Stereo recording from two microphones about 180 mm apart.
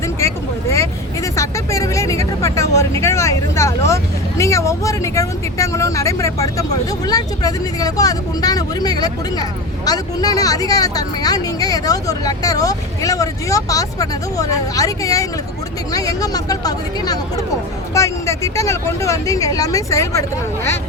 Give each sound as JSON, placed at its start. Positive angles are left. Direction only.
{"t": 0.2, "sound": "speech", "side_deg": 15}